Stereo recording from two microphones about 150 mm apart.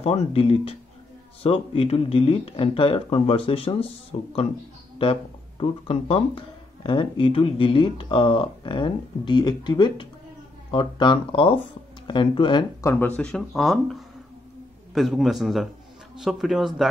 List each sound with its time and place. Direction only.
0.0 s speech: 40° left (ahead or behind)
5.6 s speech: 40° left (ahead or behind)
12.8 s speech: 10° left (ahead or behind)